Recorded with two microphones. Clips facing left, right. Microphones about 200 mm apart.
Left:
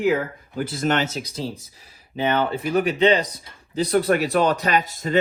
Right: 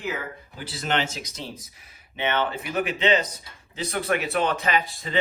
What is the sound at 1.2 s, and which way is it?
Speech, 30° left (ahead or behind).